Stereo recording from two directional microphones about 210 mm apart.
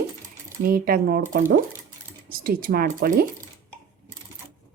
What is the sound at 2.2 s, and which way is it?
A woman's voice, 45° right (ahead or behind).